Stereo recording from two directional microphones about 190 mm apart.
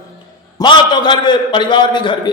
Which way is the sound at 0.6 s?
25° left (ahead or behind).